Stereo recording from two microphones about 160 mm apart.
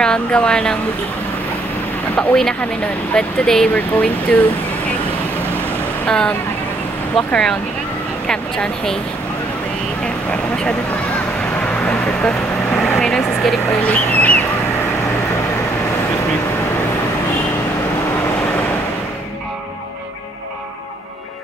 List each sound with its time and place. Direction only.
0.0 s speech: 5° left (ahead or behind)
2.1 s speech: 5° left (ahead or behind)
6.0 s speech: 5° left (ahead or behind)
11.6 s vehicle: 5° left (ahead or behind)
13.0 s speech: centre (ahead or behind)